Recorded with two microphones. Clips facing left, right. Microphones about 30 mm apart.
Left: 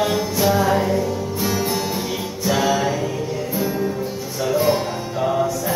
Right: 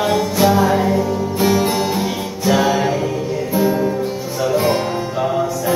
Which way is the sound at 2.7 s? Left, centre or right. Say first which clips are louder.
Right 3 dB; centre.